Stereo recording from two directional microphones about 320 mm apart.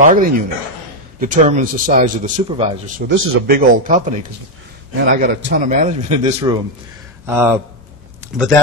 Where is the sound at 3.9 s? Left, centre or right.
Right.